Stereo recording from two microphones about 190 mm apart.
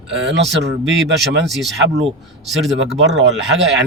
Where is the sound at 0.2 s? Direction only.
65° right (ahead or behind).